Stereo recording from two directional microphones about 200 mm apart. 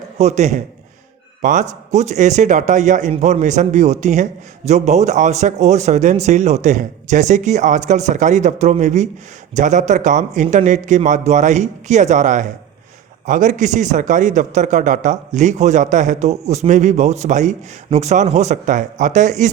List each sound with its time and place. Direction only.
0.2 s speech: 35° right (ahead or behind)